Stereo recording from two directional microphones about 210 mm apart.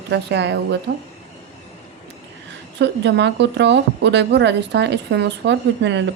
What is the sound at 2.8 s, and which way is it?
Speech, 55° right (ahead or behind).